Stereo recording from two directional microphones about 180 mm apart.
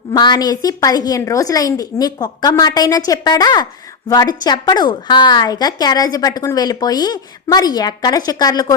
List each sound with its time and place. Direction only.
0.1 s a woman's voice: 20° left (ahead or behind)